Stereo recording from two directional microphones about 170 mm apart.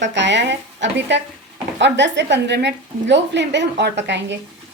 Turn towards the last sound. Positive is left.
turn(degrees=-90)